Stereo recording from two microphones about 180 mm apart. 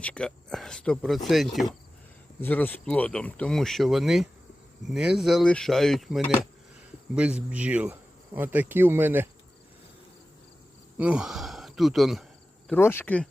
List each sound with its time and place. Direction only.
0.0 s speech: 5° left (ahead or behind)
2.4 s speech: 10° left (ahead or behind); by 9.3 s 10° right (ahead or behind)
10.9 s speech: 5° right (ahead or behind)
12.6 s speech: 10° left (ahead or behind)